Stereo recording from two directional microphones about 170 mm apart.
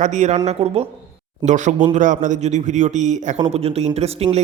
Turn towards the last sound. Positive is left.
turn(degrees=-35)  # may be behind; listen again after turning